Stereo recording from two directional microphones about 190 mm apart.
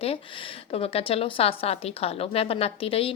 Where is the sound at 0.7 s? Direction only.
30° left (ahead or behind).